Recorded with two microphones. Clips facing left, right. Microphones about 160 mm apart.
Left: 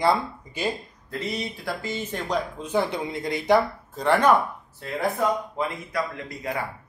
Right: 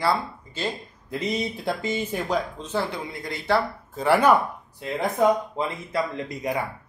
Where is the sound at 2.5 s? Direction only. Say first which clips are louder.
Left 3 dB; 15° left (ahead or behind).